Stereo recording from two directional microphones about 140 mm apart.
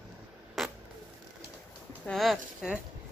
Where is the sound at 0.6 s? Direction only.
Centre (ahead or behind).